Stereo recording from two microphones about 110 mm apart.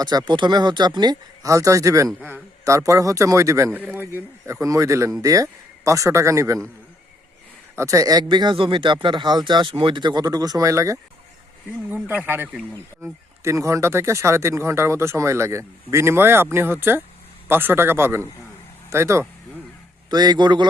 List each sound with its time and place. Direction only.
0.0 s speech: 40° right (ahead or behind)
3.7 s speech: 15° right (ahead or behind)
7.8 s speech: 30° right (ahead or behind)
12.0 s speech: 15° right (ahead or behind)
13.0 s speech: 25° right (ahead or behind)
20.1 s speech: 40° right (ahead or behind)